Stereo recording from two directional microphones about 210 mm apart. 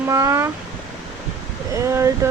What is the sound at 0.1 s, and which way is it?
Speech, 15° right (ahead or behind).